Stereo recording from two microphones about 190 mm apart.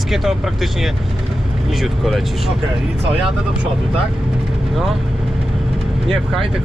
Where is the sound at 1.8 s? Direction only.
Centre (ahead or behind).